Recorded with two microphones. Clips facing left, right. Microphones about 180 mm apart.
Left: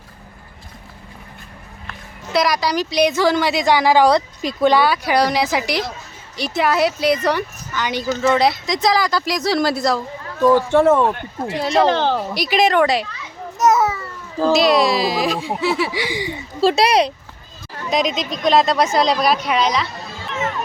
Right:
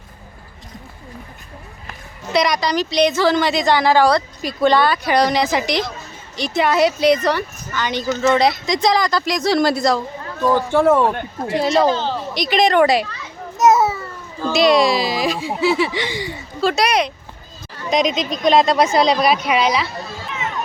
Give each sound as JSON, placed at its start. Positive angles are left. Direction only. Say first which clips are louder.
{"t": 2.3, "sound": "a woman's voice", "louder": "even", "side_deg": 5}
{"t": 11.9, "sound": "speech", "louder": "left 2 dB", "side_deg": 70}
{"t": 12.3, "sound": "speech", "louder": "right 4 dB", "side_deg": 5}
{"t": 12.8, "sound": "a child's voice", "louder": "right 2 dB", "side_deg": -5}
{"t": 14.5, "sound": "speech", "louder": "right 2 dB", "side_deg": 0}
{"t": 16.6, "sound": "speech", "louder": "left 3 dB", "side_deg": 30}
{"t": 17.9, "sound": "speech", "louder": "right 2 dB", "side_deg": 0}